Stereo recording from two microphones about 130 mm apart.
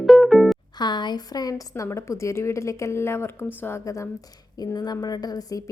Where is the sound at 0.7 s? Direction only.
35° left (ahead or behind).